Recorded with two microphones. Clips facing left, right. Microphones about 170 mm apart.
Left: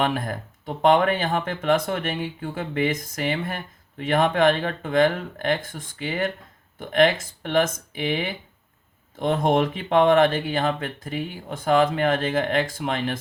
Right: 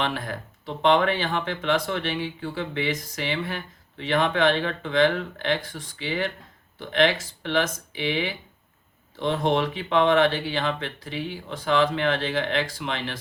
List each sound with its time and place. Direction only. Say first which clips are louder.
0.0 s speech: left 4 dB; 45° left (ahead or behind)